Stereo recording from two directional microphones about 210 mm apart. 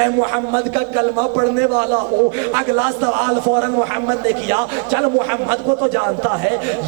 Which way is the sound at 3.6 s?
25° right (ahead or behind).